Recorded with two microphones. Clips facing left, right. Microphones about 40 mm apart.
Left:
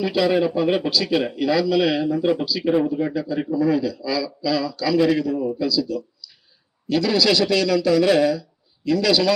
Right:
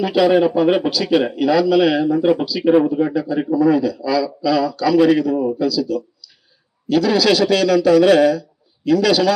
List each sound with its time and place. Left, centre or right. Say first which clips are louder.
0.0 s a man's voice: right 5 dB; right
5.5 s speech: right 3 dB; right
6.9 s speech: right 4 dB; right